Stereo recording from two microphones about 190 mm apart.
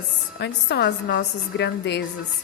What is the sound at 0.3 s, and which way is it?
A woman's voice, 60° left (ahead or behind).